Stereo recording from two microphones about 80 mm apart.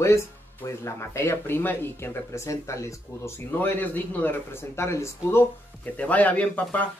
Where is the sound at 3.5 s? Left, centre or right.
Left.